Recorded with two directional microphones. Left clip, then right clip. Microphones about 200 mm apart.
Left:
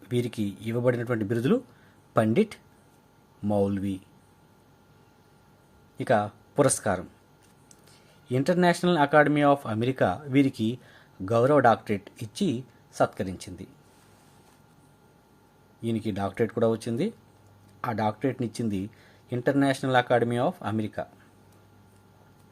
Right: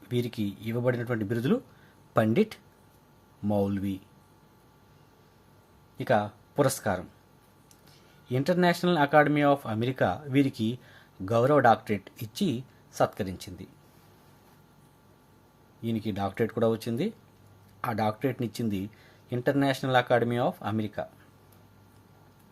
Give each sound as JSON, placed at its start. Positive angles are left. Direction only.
{"t": 0.1, "sound": "speech", "side_deg": 15}
{"t": 6.0, "sound": "speech", "side_deg": 15}
{"t": 8.3, "sound": "speech", "side_deg": 15}
{"t": 15.8, "sound": "speech", "side_deg": 15}